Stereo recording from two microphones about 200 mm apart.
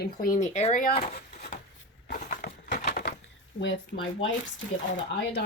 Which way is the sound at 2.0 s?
45° left (ahead or behind).